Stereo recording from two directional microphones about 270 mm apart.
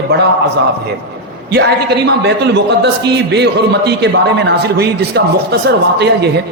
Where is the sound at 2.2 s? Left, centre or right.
Right.